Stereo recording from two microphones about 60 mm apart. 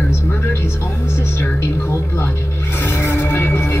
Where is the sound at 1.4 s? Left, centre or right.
Left.